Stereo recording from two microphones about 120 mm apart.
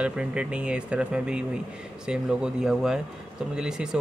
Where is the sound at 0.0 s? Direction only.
10° right (ahead or behind).